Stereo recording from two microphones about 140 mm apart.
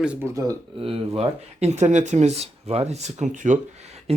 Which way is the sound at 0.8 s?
40° right (ahead or behind).